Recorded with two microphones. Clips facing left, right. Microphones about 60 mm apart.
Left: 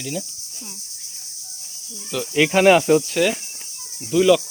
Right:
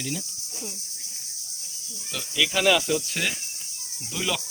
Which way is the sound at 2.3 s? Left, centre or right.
Left.